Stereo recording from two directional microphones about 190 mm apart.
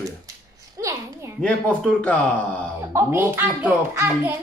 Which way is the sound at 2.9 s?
15° right (ahead or behind).